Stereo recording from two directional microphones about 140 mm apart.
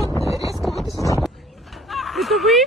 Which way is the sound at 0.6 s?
Centre (ahead or behind).